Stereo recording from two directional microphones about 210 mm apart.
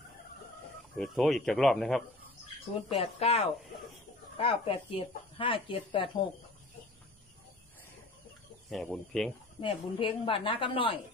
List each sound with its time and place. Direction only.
0.9 s speech: centre (ahead or behind)
2.9 s speech: 30° left (ahead or behind)
8.6 s speech: centre (ahead or behind)
9.6 s speech: 25° left (ahead or behind)